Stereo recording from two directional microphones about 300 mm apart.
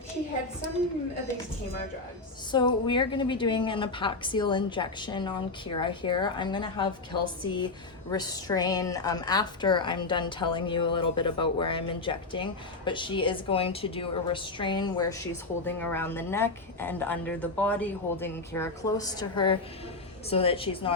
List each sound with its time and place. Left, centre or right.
2.5 s a woman's voice: centre